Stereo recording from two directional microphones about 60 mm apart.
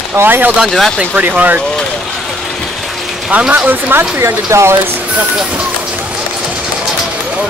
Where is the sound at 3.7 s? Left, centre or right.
Right.